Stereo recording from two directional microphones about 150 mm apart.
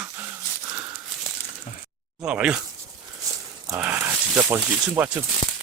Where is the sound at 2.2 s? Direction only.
5° right (ahead or behind).